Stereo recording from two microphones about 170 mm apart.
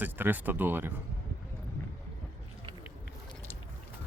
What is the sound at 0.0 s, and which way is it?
Speech, 10° right (ahead or behind).